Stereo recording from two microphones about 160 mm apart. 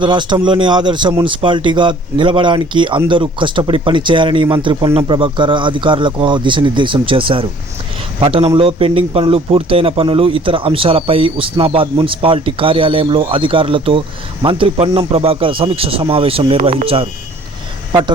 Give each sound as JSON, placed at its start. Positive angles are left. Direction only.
{"t": 0.0, "sound": "a man's voice", "side_deg": -30}